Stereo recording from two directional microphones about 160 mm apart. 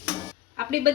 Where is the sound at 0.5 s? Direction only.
70° right (ahead or behind).